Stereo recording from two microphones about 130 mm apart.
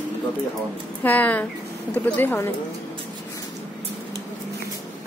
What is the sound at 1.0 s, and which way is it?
Speech, 10° left (ahead or behind).